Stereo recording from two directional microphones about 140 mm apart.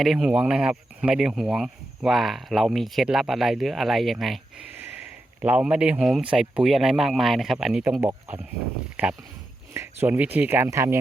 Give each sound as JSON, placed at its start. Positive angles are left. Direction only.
{"t": 0.0, "sound": "speech", "side_deg": 0}
{"t": 5.4, "sound": "speech", "side_deg": -10}